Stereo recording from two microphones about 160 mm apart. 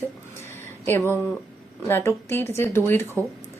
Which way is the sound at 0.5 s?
15° left (ahead or behind).